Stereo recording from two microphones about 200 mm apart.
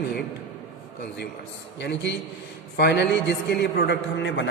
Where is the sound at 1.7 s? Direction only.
60° left (ahead or behind).